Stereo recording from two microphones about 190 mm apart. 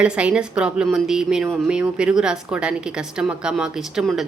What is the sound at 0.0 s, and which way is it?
Speech, 5° right (ahead or behind).